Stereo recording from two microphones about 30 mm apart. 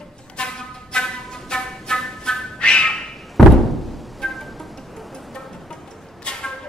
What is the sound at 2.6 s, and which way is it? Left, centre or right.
Bird, left.